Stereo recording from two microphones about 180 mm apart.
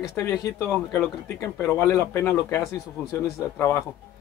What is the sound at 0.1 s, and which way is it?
Speech, 15° left (ahead or behind).